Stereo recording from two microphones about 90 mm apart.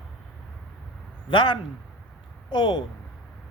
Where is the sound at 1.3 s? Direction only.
65° left (ahead or behind).